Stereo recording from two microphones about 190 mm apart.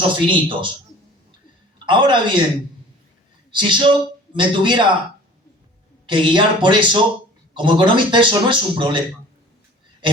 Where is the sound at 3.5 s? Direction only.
25° right (ahead or behind).